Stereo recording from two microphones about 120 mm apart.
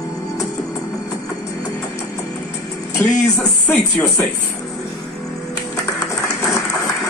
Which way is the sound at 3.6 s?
20° left (ahead or behind).